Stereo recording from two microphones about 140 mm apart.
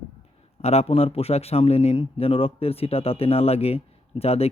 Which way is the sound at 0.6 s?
45° left (ahead or behind).